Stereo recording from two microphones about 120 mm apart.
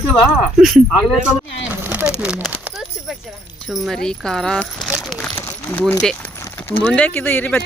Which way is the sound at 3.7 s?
5° left (ahead or behind).